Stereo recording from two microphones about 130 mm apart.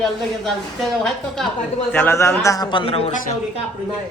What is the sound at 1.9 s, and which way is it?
Speech, 15° left (ahead or behind).